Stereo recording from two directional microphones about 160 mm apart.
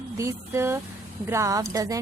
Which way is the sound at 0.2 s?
20° right (ahead or behind).